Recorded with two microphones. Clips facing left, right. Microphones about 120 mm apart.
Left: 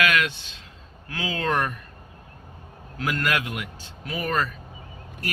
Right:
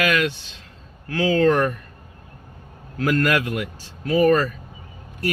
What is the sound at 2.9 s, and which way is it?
Speech, 40° right (ahead or behind).